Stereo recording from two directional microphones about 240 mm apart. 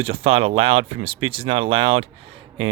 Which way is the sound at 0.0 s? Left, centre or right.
Right.